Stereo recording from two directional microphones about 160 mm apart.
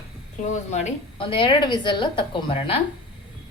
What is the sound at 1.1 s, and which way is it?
A woman's voice, 30° left (ahead or behind).